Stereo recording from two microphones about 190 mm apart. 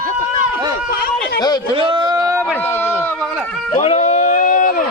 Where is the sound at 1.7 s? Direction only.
25° right (ahead or behind).